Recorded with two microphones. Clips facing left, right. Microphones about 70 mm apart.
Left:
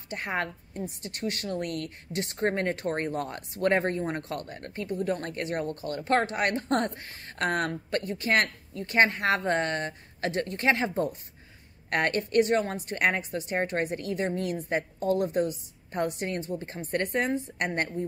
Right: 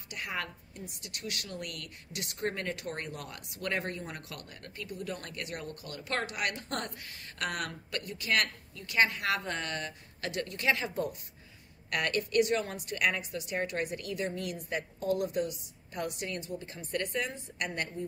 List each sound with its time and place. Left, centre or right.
0.1 s a woman's voice: left